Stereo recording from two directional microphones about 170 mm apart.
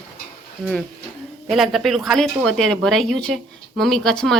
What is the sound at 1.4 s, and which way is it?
Speech, centre (ahead or behind).